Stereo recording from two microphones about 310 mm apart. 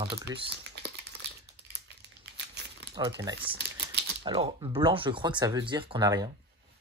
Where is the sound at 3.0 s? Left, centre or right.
Centre.